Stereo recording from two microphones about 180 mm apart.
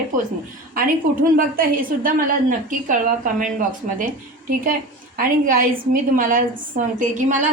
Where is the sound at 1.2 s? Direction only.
50° right (ahead or behind).